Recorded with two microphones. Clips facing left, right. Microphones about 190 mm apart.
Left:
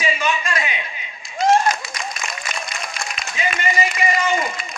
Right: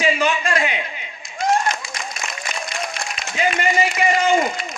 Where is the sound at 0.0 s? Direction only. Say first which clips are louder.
Right 3 dB; 55° right (ahead or behind).